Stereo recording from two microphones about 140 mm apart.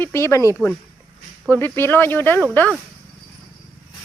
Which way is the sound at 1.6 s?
15° left (ahead or behind).